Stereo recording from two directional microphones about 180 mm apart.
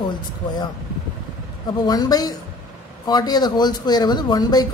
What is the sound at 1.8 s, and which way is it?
Speech, 20° left (ahead or behind).